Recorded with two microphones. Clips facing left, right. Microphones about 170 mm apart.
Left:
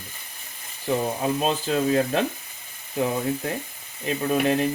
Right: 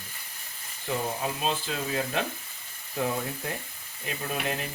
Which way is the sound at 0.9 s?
40° left (ahead or behind).